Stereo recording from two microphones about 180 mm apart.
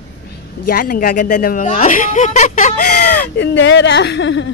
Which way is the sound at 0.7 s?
50° left (ahead or behind).